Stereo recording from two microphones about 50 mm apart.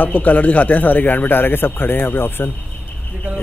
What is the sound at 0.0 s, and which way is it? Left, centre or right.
A man's voice, left.